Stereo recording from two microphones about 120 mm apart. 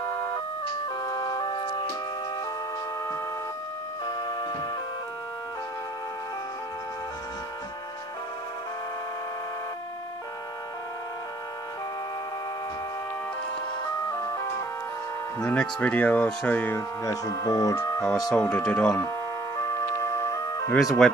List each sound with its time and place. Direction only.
1.0 s music: 35° left (ahead or behind)
4.0 s music: 35° left (ahead or behind)
14.0 s music: 25° left (ahead or behind)
15.4 s speech: 10° left (ahead or behind)
17.0 s speech: 30° left (ahead or behind)
18.3 s speech: 10° left (ahead or behind)
18.9 s music: 25° left (ahead or behind)
20.8 s speech: centre (ahead or behind)